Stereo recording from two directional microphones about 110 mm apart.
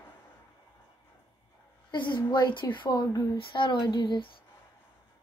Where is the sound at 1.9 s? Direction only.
45° left (ahead or behind).